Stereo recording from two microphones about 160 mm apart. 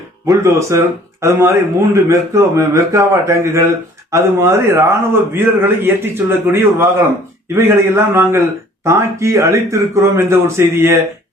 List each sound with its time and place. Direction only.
0.3 s a man's voice: 20° right (ahead or behind)